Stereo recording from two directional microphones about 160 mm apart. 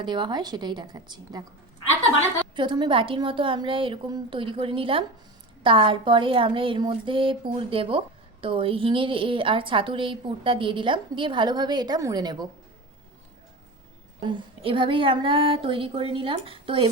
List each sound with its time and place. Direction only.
0.0 s a woman's voice: 30° right (ahead or behind)
2.6 s a woman's voice: 30° right (ahead or behind)
14.3 s a woman's voice: 30° right (ahead or behind)